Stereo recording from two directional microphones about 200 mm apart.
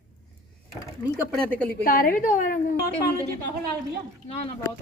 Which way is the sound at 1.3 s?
5° left (ahead or behind).